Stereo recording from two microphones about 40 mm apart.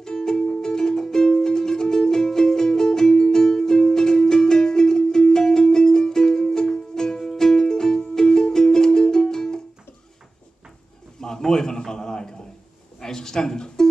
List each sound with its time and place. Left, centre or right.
0.0 s music: centre
11.1 s a sound: centre
13.0 s music: centre